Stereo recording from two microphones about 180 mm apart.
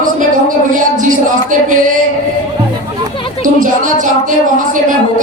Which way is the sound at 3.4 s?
45° right (ahead or behind).